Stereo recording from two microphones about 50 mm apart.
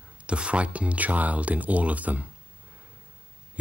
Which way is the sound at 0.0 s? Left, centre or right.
Right.